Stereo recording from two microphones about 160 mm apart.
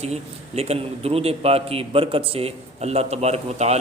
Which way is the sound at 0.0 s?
40° right (ahead or behind).